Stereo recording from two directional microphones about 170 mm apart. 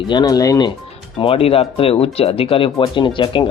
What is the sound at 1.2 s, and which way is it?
Speech, 35° left (ahead or behind).